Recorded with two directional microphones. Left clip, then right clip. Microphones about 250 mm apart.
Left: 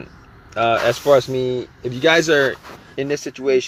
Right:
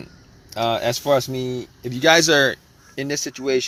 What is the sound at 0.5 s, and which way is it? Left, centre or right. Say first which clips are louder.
Speech: left 4 dB; right.